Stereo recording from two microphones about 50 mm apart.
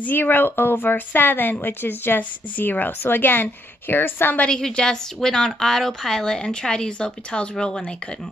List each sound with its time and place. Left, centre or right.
0.0 s a woman's voice: left
4.5 s a woman's voice: centre